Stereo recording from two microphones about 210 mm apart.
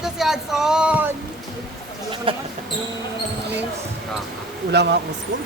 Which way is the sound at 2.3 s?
25° right (ahead or behind).